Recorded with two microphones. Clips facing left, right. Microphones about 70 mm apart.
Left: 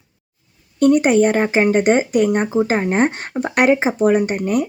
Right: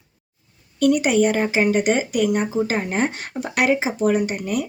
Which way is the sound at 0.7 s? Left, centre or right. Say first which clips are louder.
Left 4 dB; left.